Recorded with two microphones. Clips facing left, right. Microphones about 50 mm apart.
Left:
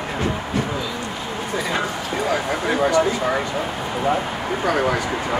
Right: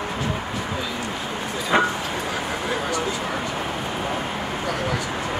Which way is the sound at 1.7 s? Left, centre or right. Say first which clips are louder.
Right 7 dB; right.